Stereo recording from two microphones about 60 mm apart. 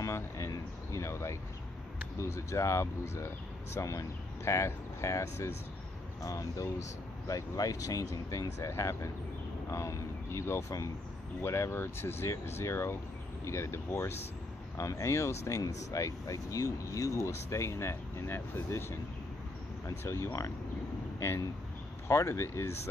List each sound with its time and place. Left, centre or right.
0.0 s a sound: left
2.1 s speech: left
3.7 s speech: left
7.2 s speech: left
14.8 s speech: left
20.0 s speech: left